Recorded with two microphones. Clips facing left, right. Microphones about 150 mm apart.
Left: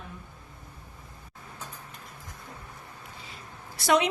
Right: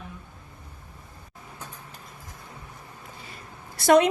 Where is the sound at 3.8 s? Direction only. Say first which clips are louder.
Right 6 dB; 50° right (ahead or behind).